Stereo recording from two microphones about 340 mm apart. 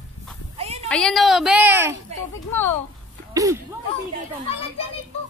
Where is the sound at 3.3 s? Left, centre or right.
Centre.